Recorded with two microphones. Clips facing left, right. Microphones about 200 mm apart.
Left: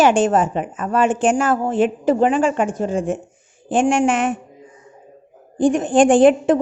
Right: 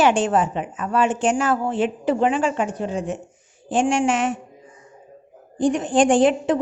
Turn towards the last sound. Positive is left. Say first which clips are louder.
# left 5 dB
turn(degrees=50)  # may be behind; listen again after turning